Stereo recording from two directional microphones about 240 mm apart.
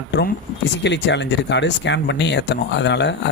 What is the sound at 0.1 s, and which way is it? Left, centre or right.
Speech, left.